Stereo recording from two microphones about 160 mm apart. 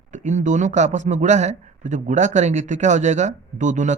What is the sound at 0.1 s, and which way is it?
A man's voice, 50° right (ahead or behind).